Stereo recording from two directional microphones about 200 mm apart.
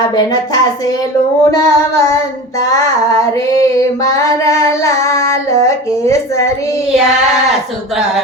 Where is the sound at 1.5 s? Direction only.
15° left (ahead or behind).